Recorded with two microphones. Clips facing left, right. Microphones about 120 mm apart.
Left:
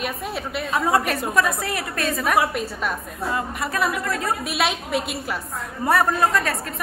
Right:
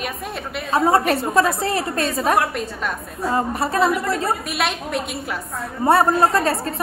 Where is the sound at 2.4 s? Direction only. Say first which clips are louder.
Even; 5° left (ahead or behind).